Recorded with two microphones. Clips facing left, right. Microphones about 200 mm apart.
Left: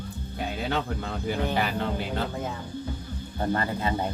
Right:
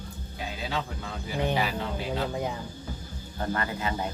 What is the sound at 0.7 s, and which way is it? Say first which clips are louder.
Speech: left 3 dB; 55° left (ahead or behind).